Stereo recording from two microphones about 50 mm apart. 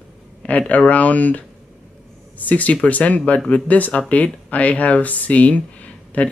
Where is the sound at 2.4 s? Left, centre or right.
Left.